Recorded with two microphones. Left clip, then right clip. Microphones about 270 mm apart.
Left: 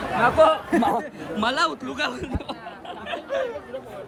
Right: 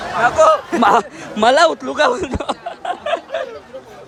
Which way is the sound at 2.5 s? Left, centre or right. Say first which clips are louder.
Right 12 dB; centre.